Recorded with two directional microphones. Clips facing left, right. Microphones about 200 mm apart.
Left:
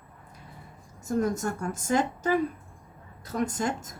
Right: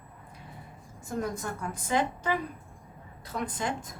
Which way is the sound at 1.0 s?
45° left (ahead or behind).